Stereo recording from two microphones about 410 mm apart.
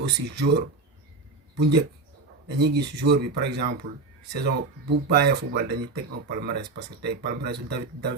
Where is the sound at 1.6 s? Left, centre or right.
Right.